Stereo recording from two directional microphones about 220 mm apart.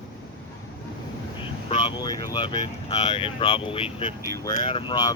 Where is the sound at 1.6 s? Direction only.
20° left (ahead or behind).